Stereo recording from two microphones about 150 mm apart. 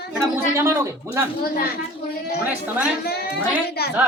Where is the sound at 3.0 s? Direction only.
90° left.